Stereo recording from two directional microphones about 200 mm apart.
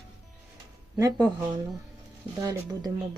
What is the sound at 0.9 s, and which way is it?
Speech, 15° right (ahead or behind).